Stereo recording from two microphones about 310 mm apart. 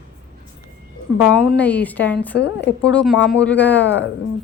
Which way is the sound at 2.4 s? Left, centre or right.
Left.